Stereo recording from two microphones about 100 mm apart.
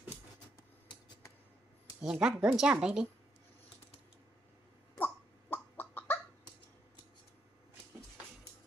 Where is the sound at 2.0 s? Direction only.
5° right (ahead or behind).